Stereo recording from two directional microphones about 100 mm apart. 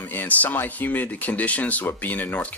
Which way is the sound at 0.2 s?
15° left (ahead or behind).